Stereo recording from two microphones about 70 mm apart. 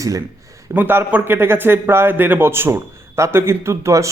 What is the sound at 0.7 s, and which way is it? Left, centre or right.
Speech, right.